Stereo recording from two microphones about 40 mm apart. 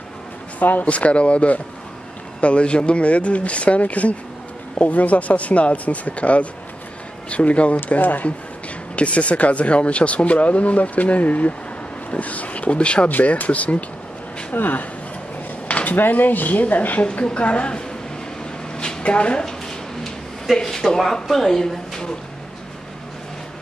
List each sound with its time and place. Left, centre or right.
0.6 s speech: left
0.8 s speech: left
8.0 s speech: left
8.9 s speech: left
14.5 s speech: left
15.7 s a sound: left
16.0 s speech: left
17.0 s a woman's voice: left
20.5 s speech: centre